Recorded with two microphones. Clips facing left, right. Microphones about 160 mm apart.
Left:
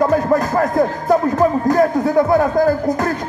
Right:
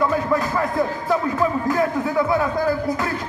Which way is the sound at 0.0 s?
45° left (ahead or behind).